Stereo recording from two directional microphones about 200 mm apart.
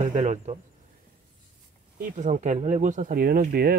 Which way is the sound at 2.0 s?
40° right (ahead or behind).